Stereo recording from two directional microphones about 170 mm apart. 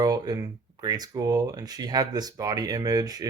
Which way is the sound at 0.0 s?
20° right (ahead or behind).